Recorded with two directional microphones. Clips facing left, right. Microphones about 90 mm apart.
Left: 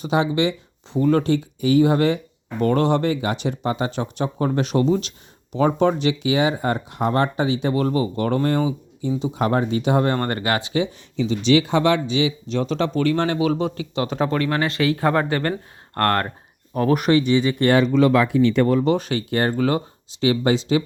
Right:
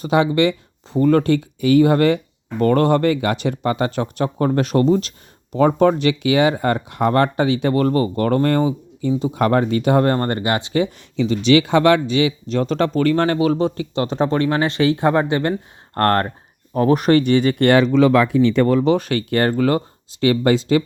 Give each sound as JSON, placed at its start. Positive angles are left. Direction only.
{"t": 0.0, "sound": "speech", "side_deg": -60}
{"t": 6.0, "sound": "speech", "side_deg": -65}
{"t": 10.2, "sound": "speech", "side_deg": -30}
{"t": 11.2, "sound": "speech", "side_deg": -70}
{"t": 16.0, "sound": "speech", "side_deg": -30}
{"t": 17.1, "sound": "speech", "side_deg": -55}
{"t": 18.9, "sound": "speech", "side_deg": -55}